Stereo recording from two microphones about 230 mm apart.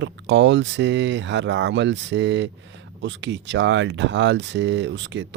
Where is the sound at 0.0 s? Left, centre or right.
Right.